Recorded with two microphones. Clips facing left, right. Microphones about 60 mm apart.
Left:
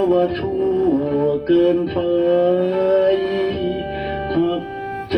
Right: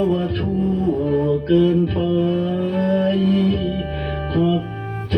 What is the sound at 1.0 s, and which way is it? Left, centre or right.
Music, left.